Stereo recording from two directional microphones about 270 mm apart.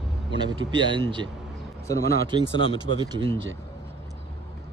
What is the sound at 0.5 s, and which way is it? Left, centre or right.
Speech, centre.